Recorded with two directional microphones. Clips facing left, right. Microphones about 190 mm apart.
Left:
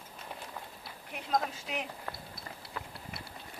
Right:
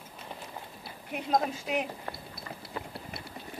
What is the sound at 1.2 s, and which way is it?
Speech, 20° right (ahead or behind).